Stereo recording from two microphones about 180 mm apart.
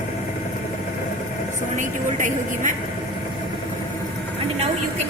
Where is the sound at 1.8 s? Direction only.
45° right (ahead or behind).